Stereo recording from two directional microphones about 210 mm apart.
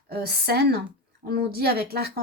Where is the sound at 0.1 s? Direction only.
50° right (ahead or behind).